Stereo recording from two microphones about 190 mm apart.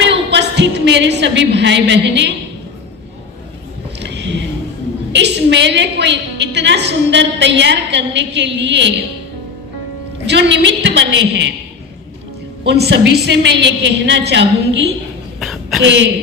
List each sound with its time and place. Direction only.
0.0 s a woman's voice: 65° right (ahead or behind)
4.0 s a sound: 70° right (ahead or behind)
5.1 s a woman's voice: 65° right (ahead or behind)
10.2 s a woman's voice: 65° right (ahead or behind)
12.6 s a woman's voice: 60° right (ahead or behind)
15.4 s a sound: centre (ahead or behind)
15.8 s a woman's voice: 70° right (ahead or behind)